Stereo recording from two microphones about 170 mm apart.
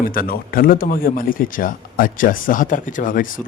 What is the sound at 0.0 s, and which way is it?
Speech, 55° left (ahead or behind).